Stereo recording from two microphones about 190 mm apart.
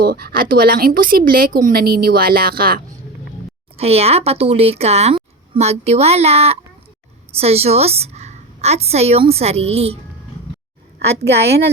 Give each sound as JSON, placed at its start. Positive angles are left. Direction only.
{"t": 0.0, "sound": "a woman's voice", "side_deg": -55}
{"t": 3.8, "sound": "a woman's voice", "side_deg": -30}
{"t": 11.2, "sound": "a woman's voice", "side_deg": -60}